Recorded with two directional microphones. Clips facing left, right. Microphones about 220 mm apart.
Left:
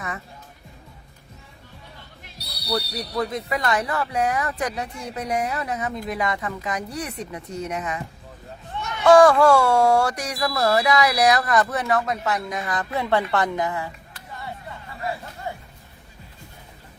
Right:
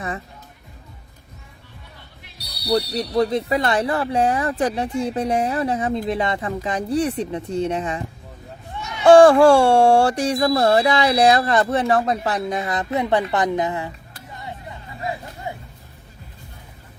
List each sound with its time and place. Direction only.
2.4 s a sound: 15° right (ahead or behind)
2.7 s speech: 30° right (ahead or behind)
9.0 s speech: 30° right (ahead or behind)
14.3 s music: 20° right (ahead or behind)